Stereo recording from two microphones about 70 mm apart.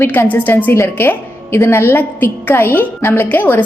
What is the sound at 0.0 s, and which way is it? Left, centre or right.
Speech, left.